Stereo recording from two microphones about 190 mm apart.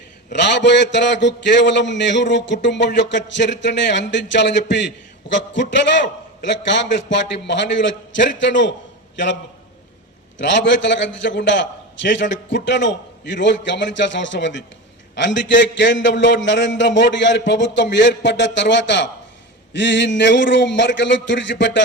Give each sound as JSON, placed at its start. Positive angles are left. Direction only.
{"t": 0.3, "sound": "a man's voice", "side_deg": 65}